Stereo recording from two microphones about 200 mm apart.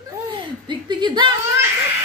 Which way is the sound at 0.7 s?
20° right (ahead or behind).